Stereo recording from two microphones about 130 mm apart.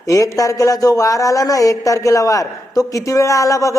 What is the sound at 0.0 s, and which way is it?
A man's voice, 25° left (ahead or behind).